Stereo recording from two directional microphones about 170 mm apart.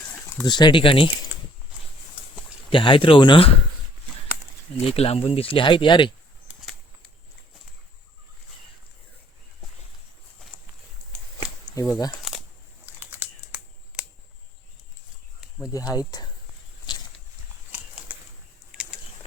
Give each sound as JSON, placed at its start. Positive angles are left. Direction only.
{"t": 0.0, "sound": "a sound", "side_deg": 5}
{"t": 0.4, "sound": "speech", "side_deg": 25}
{"t": 2.6, "sound": "speech", "side_deg": 30}
{"t": 4.9, "sound": "speech", "side_deg": 35}
{"t": 11.6, "sound": "speech", "side_deg": 20}
{"t": 12.1, "sound": "a sound", "side_deg": 0}
{"t": 12.8, "sound": "computer keyboard", "side_deg": -15}
{"t": 15.7, "sound": "speech", "side_deg": 20}
{"t": 18.1, "sound": "a sound", "side_deg": -10}